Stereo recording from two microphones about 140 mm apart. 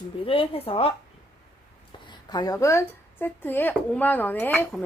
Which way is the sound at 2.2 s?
30° left (ahead or behind).